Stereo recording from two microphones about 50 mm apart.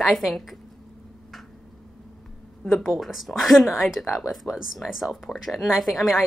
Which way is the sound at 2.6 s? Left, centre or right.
Centre.